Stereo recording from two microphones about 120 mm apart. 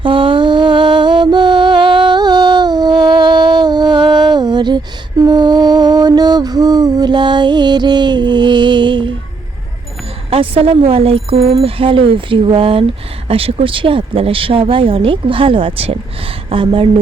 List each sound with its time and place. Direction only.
0.0 s mantra: 45° right (ahead or behind)
10.2 s speech: 50° right (ahead or behind)